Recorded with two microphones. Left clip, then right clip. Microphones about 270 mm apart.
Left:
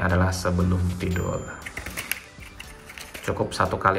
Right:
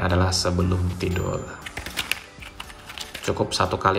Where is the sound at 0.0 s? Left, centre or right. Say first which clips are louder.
Right 2 dB; centre.